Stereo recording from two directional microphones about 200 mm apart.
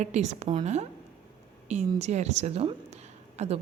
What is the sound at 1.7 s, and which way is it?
Speech, 35° right (ahead or behind).